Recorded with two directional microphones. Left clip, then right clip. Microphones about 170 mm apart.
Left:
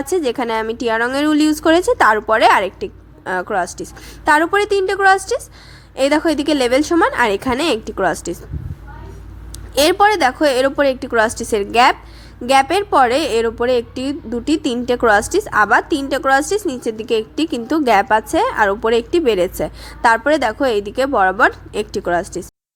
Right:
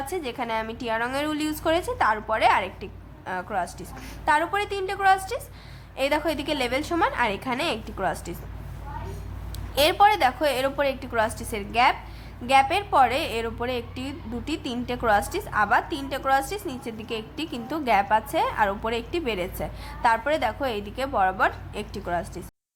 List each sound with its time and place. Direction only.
0.0 s a woman's voice: 45° left (ahead or behind)
9.7 s a woman's voice: 40° left (ahead or behind)